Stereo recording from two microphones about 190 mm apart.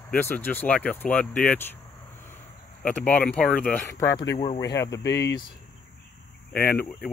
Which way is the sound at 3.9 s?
15° left (ahead or behind).